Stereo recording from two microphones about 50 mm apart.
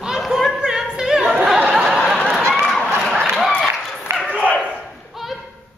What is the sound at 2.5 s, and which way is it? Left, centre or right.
Run, centre.